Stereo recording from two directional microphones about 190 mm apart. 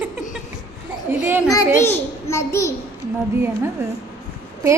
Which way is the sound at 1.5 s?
15° left (ahead or behind).